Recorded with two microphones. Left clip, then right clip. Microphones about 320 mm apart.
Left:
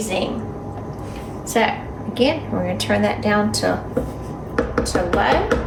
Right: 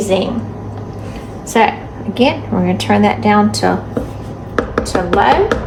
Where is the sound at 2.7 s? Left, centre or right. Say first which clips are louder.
Right 6 dB; right.